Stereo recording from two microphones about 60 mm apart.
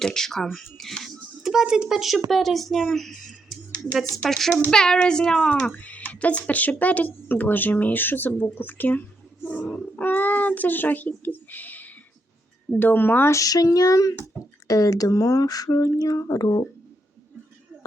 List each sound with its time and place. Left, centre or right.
0.0 s speech: centre
1.4 s a child's voice: centre; by 9.6 s left
10.0 s a sound: left
12.8 s speech: left
13.3 s speech: left
16.0 s speech: left